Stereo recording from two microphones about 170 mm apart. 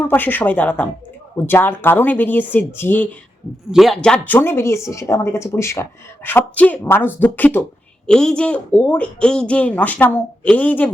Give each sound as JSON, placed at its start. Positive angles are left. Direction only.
{"t": 0.1, "sound": "a woman's voice", "side_deg": 10}
{"t": 3.7, "sound": "a woman's voice", "side_deg": 0}